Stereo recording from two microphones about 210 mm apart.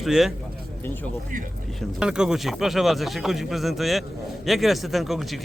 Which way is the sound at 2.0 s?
5° right (ahead or behind).